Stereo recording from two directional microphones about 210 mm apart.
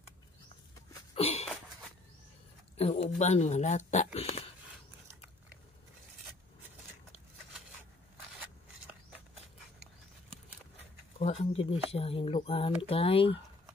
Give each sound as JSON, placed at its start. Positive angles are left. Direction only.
{"t": 1.1, "sound": "sneeze", "side_deg": 30}
{"t": 2.8, "sound": "speech", "side_deg": 30}
{"t": 11.1, "sound": "speech", "side_deg": 30}